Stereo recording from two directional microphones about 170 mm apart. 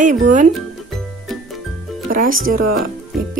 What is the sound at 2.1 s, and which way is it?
Speech, 55° right (ahead or behind).